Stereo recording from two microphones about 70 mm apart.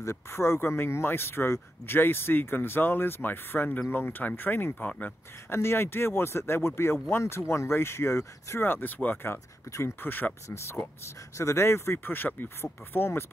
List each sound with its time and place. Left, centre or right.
0.0 s speech: left
5.5 s speech: left
9.7 s speech: left
10.0 s speech: left
10.5 s speech: left
12.1 s speech: left